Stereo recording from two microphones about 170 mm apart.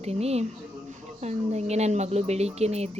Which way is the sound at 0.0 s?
40° right (ahead or behind).